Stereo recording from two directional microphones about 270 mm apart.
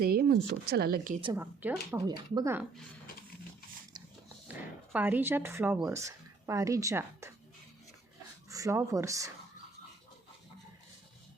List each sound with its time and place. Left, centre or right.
0.0 s speech: right
1.2 s speech: centre
4.4 s speech: centre
8.4 s speech: centre